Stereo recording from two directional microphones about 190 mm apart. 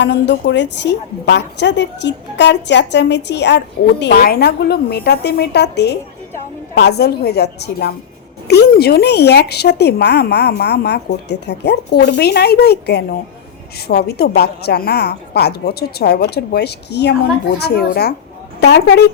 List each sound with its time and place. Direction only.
0.0 s a woman's voice: 70° left (ahead or behind)
4.0 s a woman's voice: 55° left (ahead or behind)